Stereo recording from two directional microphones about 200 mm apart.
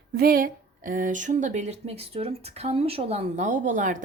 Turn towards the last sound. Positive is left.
turn(degrees=-40)  # may be behind; listen again after turning